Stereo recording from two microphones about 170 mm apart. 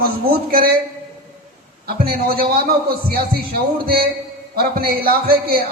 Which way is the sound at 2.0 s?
60° right (ahead or behind).